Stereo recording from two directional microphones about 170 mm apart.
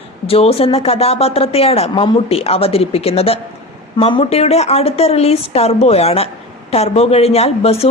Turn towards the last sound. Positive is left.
turn(degrees=35)  # may be behind; listen again after turning